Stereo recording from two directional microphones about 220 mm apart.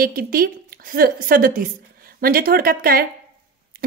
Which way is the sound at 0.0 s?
40° right (ahead or behind).